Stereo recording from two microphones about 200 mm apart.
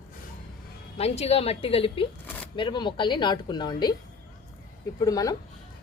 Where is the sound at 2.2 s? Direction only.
10° left (ahead or behind).